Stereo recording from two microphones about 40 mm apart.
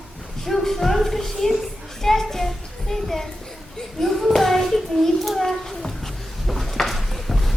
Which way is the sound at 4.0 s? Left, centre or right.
Centre.